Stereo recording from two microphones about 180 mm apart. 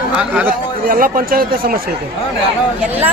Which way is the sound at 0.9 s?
50° right (ahead or behind).